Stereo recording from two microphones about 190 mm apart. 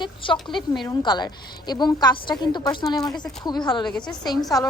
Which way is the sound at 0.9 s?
25° left (ahead or behind).